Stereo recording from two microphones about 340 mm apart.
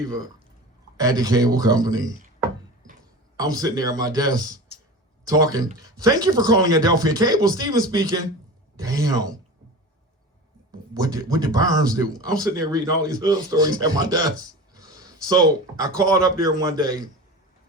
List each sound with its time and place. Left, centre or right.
0.9 s speech: centre
3.3 s speech: centre
11.0 s speech: centre